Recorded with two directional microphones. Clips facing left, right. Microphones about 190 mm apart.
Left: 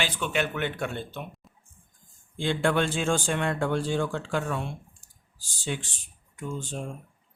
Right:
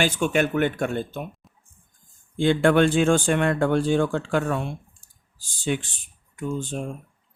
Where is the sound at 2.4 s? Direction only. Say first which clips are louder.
Right 7 dB; 60° right (ahead or behind).